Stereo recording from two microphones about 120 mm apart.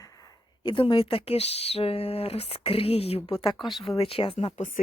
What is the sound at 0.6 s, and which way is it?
Speech, 45° left (ahead or behind).